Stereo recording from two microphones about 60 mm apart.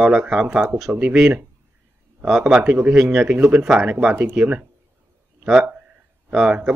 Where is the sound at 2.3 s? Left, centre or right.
Centre.